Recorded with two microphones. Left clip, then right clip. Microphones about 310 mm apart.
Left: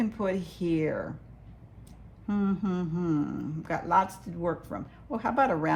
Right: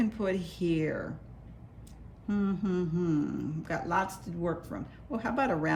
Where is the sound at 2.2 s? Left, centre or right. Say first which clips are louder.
Left 2 dB; centre.